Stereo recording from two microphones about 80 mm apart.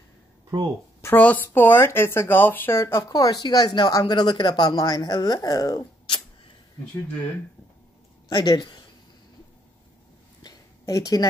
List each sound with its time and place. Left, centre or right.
1.1 s speech: left
2.8 s speech: left
3.4 s speech: left
8.3 s speech: left
10.4 s a sound: left